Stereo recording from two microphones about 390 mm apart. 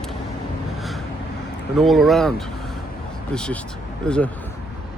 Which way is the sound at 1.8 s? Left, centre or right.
Centre.